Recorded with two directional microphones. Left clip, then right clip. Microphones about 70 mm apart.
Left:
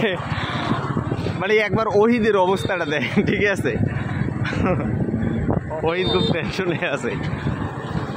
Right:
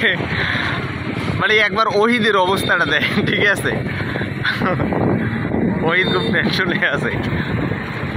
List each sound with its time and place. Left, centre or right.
1.4 s speech: left
5.9 s speech: left